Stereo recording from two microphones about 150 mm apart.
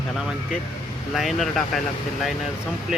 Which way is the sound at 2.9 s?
5° right (ahead or behind).